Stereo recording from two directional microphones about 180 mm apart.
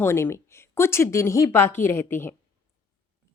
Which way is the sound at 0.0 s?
15° left (ahead or behind).